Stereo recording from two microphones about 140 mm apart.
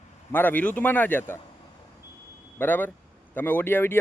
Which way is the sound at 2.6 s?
15° left (ahead or behind).